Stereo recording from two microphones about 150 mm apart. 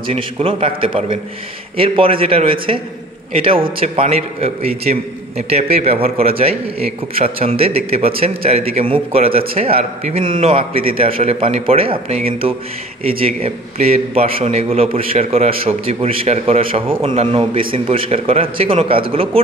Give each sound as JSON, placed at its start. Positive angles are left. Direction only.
{"t": 0.0, "sound": "a man's voice", "side_deg": -40}